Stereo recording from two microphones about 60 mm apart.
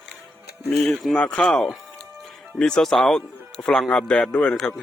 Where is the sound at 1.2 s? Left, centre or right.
Centre.